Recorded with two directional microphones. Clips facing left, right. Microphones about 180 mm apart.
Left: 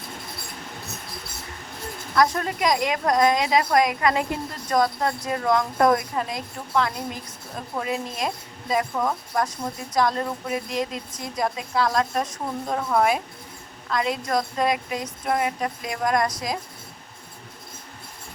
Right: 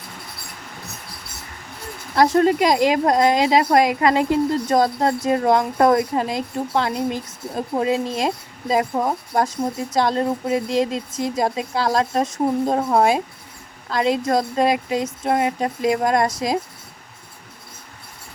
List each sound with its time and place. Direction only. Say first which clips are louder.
2.1 s speech: right 7 dB; 30° right (ahead or behind)